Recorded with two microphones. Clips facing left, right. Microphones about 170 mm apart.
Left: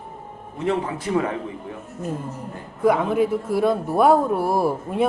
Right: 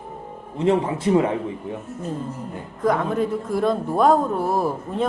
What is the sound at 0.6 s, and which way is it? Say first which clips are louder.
Speech: right 4 dB; 25° right (ahead or behind).